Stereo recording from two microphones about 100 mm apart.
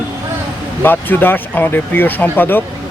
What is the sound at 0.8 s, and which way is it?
Speech, 20° left (ahead or behind).